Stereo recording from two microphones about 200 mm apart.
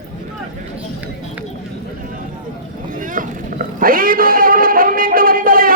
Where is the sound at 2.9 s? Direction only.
40° right (ahead or behind).